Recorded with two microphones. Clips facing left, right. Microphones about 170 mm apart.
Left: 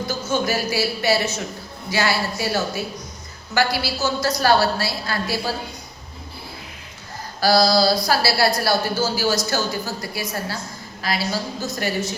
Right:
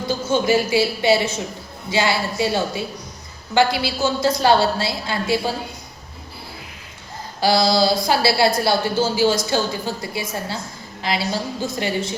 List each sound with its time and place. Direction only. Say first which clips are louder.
0.4 s a woman's voice: right 5 dB; 25° right (ahead or behind)
7.4 s a woman's voice: even; 20° right (ahead or behind)